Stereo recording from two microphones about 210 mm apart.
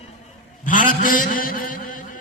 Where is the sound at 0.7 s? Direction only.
40° left (ahead or behind).